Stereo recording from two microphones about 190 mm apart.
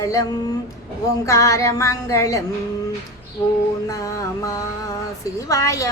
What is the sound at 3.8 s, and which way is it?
Speech, 15° left (ahead or behind).